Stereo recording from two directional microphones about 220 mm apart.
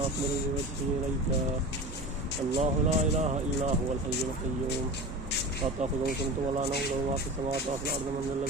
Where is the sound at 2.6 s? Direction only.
30° right (ahead or behind).